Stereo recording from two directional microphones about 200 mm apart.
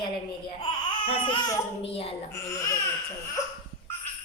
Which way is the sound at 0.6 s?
25° left (ahead or behind).